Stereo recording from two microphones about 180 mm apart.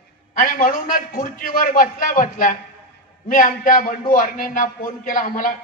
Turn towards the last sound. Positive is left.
turn(degrees=45)  # may be behind; listen again after turning